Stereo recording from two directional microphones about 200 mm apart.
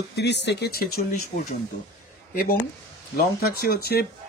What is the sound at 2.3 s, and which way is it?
Speech, 45° left (ahead or behind).